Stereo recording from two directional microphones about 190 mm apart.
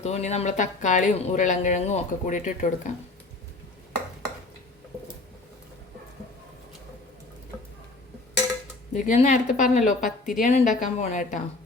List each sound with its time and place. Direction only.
0.0 s speech: 35° left (ahead or behind)
8.9 s speech: 40° left (ahead or behind)